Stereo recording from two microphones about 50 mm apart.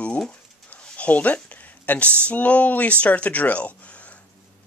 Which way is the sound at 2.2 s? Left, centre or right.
Left.